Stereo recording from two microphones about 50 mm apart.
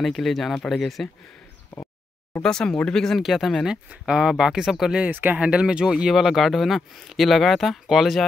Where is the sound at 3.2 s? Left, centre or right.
Centre.